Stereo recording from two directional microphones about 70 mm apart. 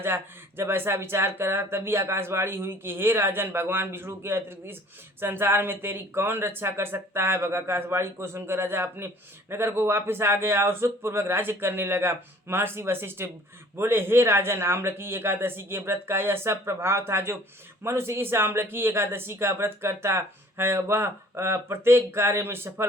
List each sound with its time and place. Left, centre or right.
0.0 s speech: right